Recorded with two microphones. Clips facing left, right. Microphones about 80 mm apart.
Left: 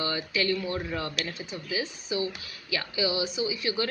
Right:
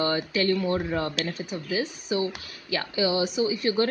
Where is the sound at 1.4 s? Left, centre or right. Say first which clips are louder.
Right 4 dB; right.